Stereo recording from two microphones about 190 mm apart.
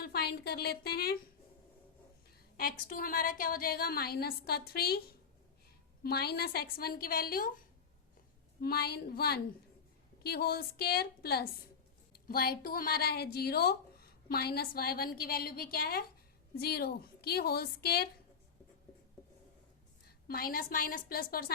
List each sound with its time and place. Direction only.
0.0 s a woman's voice: 55° left (ahead or behind)
2.6 s a woman's voice: 50° left (ahead or behind)
6.0 s a woman's voice: 55° left (ahead or behind)
8.6 s a woman's voice: 55° left (ahead or behind)
20.1 s a woman's voice: 50° left (ahead or behind)